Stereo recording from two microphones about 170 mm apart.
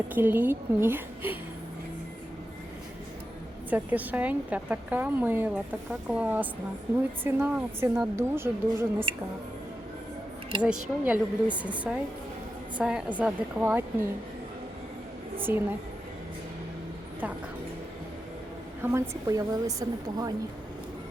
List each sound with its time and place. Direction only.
0.1 s a woman's voice: 10° right (ahead or behind)
3.7 s a woman's voice: 10° right (ahead or behind)
10.6 s a woman's voice: 10° right (ahead or behind)
15.4 s a woman's voice: 10° right (ahead or behind)
18.8 s a woman's voice: 15° right (ahead or behind)